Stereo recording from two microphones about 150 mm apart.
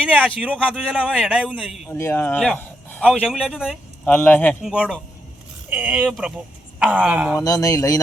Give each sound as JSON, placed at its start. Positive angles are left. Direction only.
{"t": 0.1, "sound": "a man's voice", "side_deg": 5}
{"t": 0.7, "sound": "a man's voice", "side_deg": -5}
{"t": 1.9, "sound": "speech", "side_deg": 15}
{"t": 3.2, "sound": "a man's voice", "side_deg": -5}
{"t": 4.0, "sound": "speech", "side_deg": 10}
{"t": 4.6, "sound": "a man's voice", "side_deg": -5}
{"t": 7.3, "sound": "speech", "side_deg": 25}